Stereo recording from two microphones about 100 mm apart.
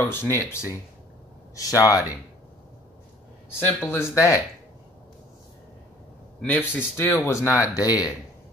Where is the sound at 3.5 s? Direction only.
20° left (ahead or behind).